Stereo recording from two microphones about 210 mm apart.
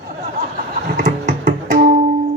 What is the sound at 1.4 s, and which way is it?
Music, 40° right (ahead or behind).